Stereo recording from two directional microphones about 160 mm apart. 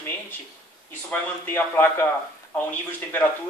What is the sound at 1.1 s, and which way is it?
Speech, 10° left (ahead or behind).